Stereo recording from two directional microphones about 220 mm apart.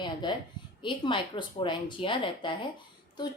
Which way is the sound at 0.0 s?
20° left (ahead or behind).